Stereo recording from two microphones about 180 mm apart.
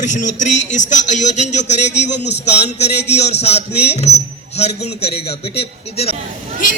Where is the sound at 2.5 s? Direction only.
40° left (ahead or behind).